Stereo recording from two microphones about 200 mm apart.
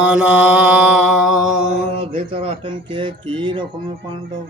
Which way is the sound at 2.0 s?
30° right (ahead or behind).